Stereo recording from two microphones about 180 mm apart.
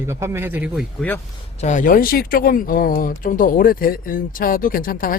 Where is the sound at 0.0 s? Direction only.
15° right (ahead or behind).